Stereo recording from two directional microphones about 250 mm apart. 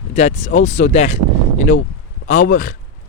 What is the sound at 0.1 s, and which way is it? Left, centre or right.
Speech, left.